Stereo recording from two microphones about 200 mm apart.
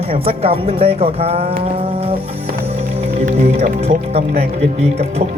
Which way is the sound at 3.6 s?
30° right (ahead or behind).